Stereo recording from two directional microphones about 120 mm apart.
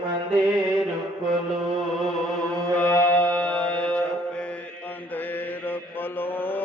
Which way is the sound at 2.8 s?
15° left (ahead or behind).